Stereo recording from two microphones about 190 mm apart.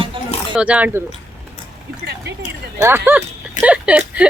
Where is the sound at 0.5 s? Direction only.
5° right (ahead or behind).